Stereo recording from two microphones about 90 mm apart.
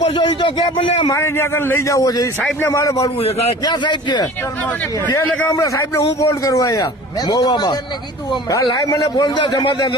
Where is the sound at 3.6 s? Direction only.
60° left (ahead or behind).